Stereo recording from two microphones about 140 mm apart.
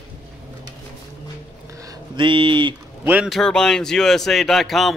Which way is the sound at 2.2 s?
35° right (ahead or behind).